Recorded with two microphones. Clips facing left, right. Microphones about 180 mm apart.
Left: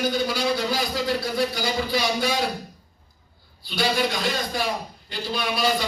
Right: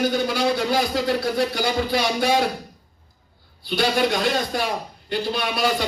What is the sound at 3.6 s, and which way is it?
A man's voice, 55° right (ahead or behind).